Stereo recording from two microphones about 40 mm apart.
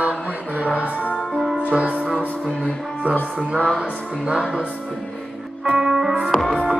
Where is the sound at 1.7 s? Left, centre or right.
Right.